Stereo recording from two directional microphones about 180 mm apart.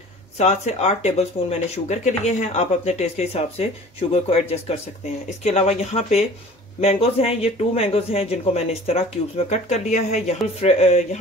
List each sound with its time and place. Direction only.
0.4 s speech: 40° left (ahead or behind)